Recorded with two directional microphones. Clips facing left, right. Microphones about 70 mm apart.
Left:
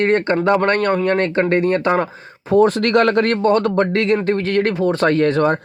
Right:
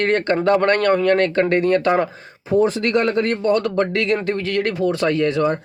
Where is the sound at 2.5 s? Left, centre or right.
Left.